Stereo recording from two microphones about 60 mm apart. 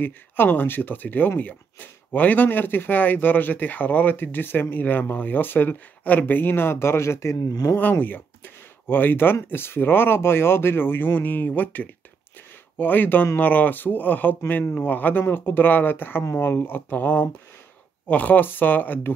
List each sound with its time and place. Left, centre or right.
0.0 s speech: left
7.3 s speech: left
7.7 s speech: left